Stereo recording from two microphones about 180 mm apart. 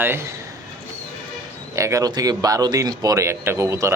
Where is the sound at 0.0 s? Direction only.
10° right (ahead or behind).